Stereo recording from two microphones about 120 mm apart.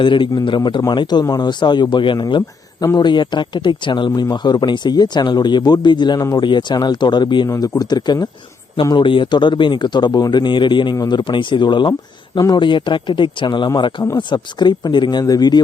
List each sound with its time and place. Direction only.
0.0 s a man's voice: 45° left (ahead or behind)